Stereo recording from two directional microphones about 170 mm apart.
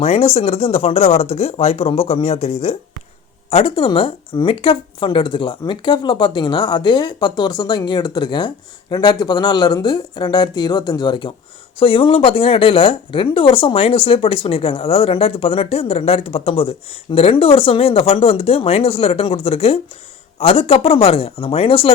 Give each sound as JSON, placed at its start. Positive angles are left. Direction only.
{"t": 0.0, "sound": "a woman's voice", "side_deg": 35}